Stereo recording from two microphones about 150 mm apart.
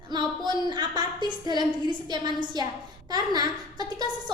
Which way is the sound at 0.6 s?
30° right (ahead or behind).